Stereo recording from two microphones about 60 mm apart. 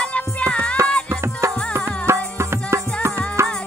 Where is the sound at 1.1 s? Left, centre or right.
Right.